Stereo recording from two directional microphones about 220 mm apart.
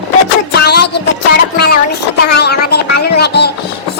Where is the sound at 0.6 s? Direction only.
50° left (ahead or behind).